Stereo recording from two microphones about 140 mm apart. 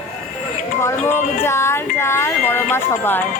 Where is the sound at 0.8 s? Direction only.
20° left (ahead or behind).